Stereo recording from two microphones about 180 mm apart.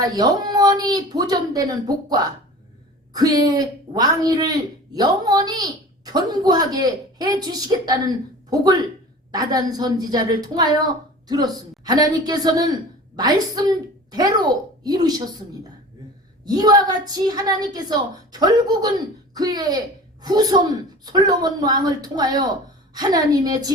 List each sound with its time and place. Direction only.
0.0 s a woman's voice: 20° right (ahead or behind)
16.5 s speech: 20° right (ahead or behind)